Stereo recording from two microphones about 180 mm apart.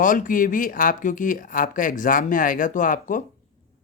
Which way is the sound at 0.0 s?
50° left (ahead or behind).